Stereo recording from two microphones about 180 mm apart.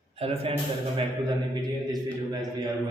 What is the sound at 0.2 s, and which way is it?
Speech, 35° right (ahead or behind).